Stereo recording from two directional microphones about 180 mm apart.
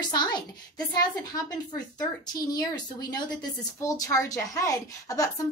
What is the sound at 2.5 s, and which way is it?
Speech, 20° left (ahead or behind).